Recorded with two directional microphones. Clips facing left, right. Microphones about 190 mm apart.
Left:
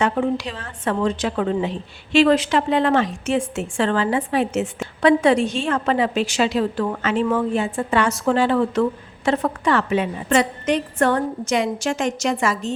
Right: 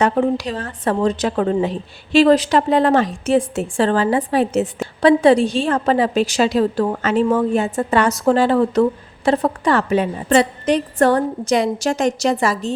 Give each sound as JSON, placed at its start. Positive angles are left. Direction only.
{"t": 0.0, "sound": "a woman's voice", "side_deg": -40}